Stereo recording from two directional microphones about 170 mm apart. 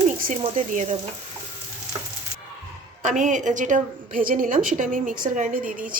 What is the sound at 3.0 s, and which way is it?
A woman's voice, 45° right (ahead or behind).